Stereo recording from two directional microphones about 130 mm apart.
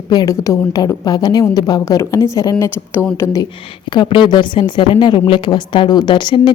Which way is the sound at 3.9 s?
35° left (ahead or behind).